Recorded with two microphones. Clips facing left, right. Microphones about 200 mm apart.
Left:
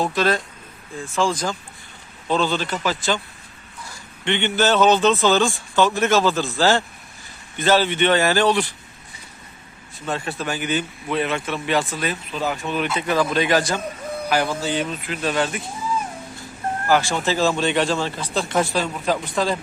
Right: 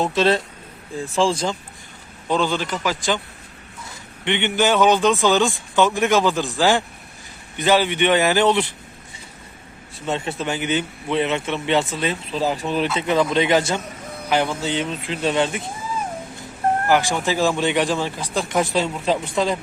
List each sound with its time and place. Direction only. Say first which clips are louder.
0.0 s speech: right 2 dB; 25° right (ahead or behind)
2.2 s a man's voice: even; 15° right (ahead or behind)
10.1 s speech: right 2 dB; 20° right (ahead or behind)
13.0 s speech: right 1 dB; 25° right (ahead or behind)
16.9 s speech: left 3 dB; 15° right (ahead or behind)
18.7 s speech: right 2 dB; 25° right (ahead or behind)